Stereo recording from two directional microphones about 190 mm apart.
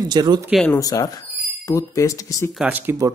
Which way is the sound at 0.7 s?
20° left (ahead or behind).